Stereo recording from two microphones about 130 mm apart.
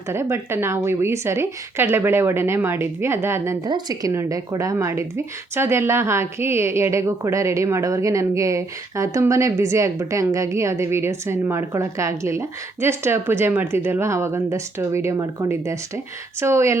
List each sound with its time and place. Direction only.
0.1 s speech: 20° right (ahead or behind)
3.7 s speech: 30° right (ahead or behind)